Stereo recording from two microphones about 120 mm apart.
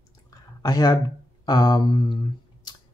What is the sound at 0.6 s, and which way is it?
Speech, 30° left (ahead or behind).